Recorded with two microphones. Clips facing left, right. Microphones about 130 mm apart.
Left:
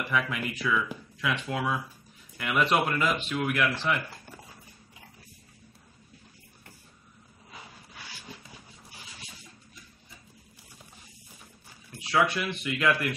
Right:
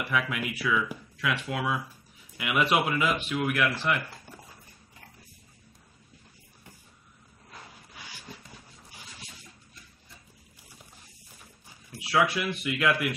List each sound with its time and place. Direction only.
0.1 s speech: 5° right (ahead or behind)
11.9 s speech: 5° right (ahead or behind)